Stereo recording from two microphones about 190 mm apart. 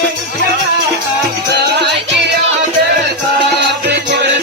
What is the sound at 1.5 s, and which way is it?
Music, 60° right (ahead or behind).